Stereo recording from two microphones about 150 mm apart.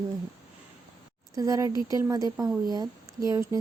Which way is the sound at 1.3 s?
20° right (ahead or behind).